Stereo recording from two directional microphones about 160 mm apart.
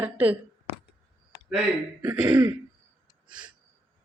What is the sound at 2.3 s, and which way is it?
Throat clearing, 25° right (ahead or behind).